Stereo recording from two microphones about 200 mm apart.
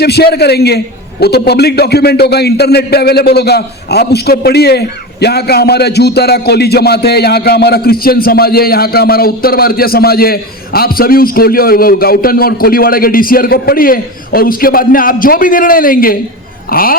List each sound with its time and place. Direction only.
0.0 s a man's voice: 55° left (ahead or behind)